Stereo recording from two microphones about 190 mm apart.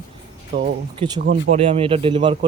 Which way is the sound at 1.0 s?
25° right (ahead or behind).